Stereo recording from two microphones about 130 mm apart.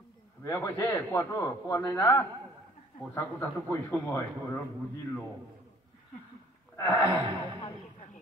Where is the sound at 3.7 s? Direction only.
20° left (ahead or behind).